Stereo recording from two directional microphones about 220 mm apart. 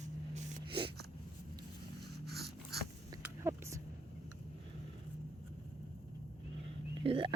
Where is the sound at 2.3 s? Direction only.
45° right (ahead or behind).